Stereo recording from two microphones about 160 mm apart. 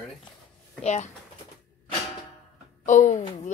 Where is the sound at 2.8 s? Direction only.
50° left (ahead or behind).